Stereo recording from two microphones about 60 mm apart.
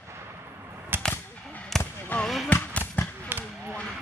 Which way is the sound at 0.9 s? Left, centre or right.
Right.